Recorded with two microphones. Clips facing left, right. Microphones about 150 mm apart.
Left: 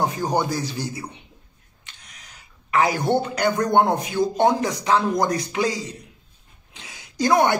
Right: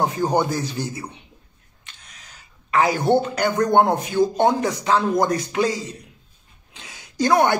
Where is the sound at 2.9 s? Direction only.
20° right (ahead or behind).